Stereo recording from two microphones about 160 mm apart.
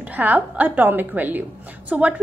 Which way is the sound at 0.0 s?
10° right (ahead or behind).